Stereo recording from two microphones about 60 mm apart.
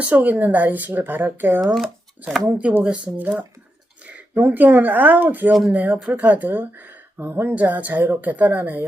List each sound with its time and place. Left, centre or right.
0.0 s speech: right
1.6 s speech: centre
2.8 s speech: centre